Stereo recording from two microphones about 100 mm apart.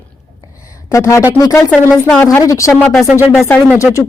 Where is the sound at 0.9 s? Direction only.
30° left (ahead or behind).